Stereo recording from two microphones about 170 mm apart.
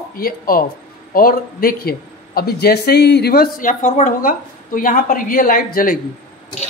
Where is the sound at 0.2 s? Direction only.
55° left (ahead or behind).